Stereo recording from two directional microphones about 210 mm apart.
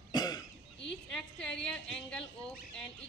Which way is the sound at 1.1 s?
5° left (ahead or behind).